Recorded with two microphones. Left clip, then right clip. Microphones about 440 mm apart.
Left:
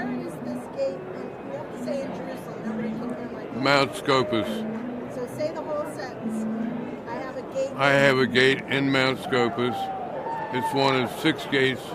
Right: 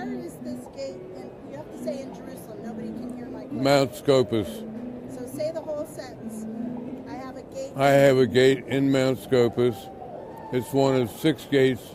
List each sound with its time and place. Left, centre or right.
3.6 s speech: right
7.8 s speech: right